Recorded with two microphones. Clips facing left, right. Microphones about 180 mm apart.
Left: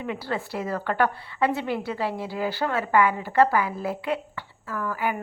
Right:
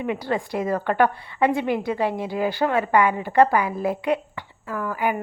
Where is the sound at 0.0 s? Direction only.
15° right (ahead or behind).